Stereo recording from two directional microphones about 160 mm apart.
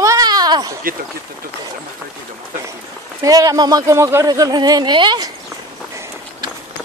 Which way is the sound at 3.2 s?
20° right (ahead or behind).